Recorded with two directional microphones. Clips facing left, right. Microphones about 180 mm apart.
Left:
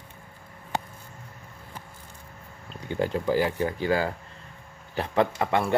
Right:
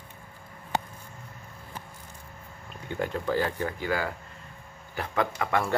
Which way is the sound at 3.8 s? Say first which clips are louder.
Left 5 dB; 25° left (ahead or behind).